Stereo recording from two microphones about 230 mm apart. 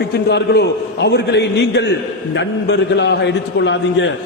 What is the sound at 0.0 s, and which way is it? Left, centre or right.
A man's voice, left.